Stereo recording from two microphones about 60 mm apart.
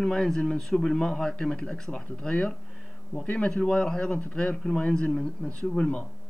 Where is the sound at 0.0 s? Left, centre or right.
Centre.